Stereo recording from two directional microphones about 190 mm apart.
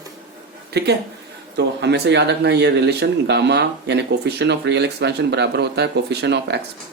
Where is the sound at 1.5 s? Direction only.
65° right (ahead or behind).